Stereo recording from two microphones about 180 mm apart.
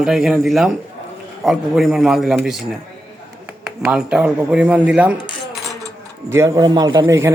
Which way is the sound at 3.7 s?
5° right (ahead or behind).